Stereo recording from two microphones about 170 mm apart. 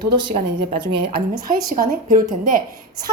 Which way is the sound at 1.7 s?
55° right (ahead or behind).